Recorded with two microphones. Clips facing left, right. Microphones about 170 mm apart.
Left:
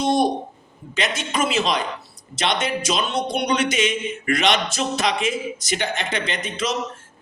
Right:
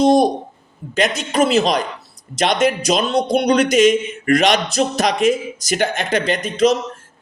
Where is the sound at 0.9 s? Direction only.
45° right (ahead or behind).